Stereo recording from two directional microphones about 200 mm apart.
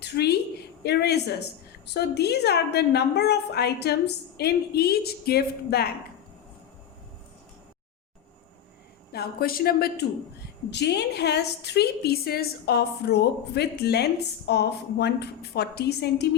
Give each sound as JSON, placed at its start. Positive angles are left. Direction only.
{"t": 0.0, "sound": "a sound", "side_deg": 55}
{"t": 0.8, "sound": "a woman's voice", "side_deg": 55}
{"t": 9.1, "sound": "a woman's voice", "side_deg": 50}